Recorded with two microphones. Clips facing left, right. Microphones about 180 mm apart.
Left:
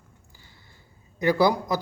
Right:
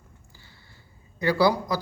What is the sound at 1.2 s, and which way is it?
Speech, 20° left (ahead or behind).